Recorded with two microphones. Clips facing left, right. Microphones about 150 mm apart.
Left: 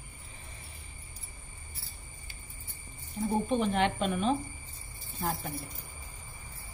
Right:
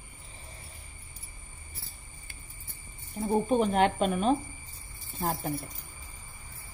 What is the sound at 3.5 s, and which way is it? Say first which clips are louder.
Speech: right 5 dB; 45° right (ahead or behind).